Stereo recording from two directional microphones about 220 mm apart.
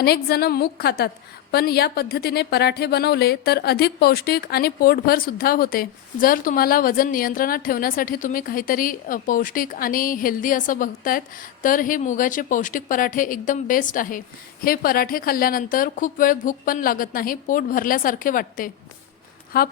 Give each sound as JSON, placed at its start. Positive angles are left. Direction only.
{"t": 0.0, "sound": "a woman's voice", "side_deg": 45}